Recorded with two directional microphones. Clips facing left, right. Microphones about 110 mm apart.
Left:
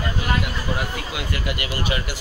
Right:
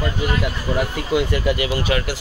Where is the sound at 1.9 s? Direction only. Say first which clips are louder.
Right 5 dB; 90° right.